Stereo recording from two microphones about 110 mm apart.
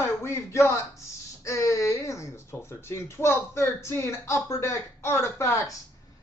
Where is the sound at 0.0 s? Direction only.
25° left (ahead or behind).